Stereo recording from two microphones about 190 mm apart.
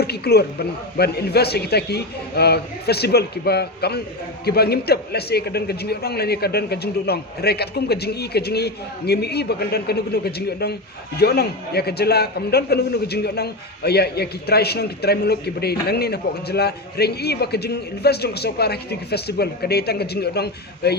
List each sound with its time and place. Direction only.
0.0 s a man's voice: 55° left (ahead or behind)